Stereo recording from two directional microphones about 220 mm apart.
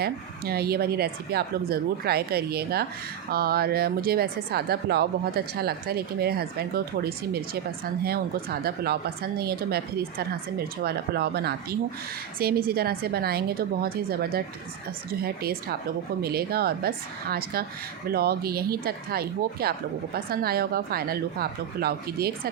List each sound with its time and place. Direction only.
0.0 s speech: 45° right (ahead or behind)